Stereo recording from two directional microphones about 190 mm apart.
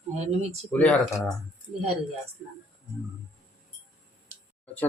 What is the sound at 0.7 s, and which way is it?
Speech, 5° left (ahead or behind).